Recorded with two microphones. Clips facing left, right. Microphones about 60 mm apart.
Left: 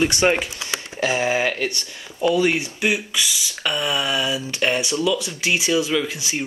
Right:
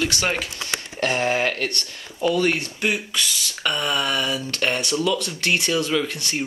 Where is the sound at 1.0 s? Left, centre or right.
Centre.